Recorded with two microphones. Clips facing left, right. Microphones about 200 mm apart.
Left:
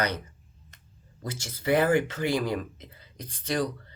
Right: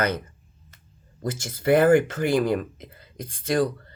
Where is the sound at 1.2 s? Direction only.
50° right (ahead or behind).